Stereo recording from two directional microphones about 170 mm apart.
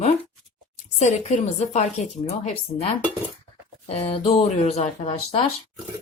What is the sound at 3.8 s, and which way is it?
Speech, 35° left (ahead or behind).